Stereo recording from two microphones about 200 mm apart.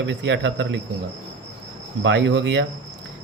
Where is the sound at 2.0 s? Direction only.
70° right (ahead or behind).